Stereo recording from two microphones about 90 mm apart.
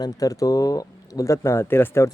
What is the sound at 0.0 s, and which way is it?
Speech, 40° left (ahead or behind).